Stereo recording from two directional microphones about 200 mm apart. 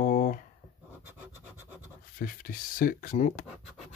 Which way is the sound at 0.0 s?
45° left (ahead or behind).